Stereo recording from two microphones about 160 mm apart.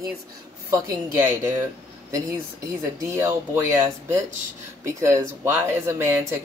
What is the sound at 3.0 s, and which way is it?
Speech, 15° right (ahead or behind).